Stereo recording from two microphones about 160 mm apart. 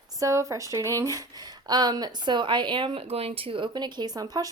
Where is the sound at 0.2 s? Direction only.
20° right (ahead or behind).